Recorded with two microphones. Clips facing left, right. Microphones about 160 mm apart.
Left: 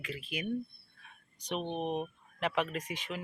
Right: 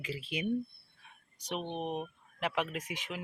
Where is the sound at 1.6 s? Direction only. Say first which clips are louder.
Left 2 dB; 10° left (ahead or behind).